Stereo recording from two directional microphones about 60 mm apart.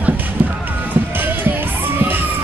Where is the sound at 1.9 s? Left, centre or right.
Right.